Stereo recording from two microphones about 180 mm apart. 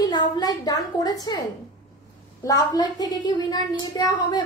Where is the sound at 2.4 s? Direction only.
20° left (ahead or behind).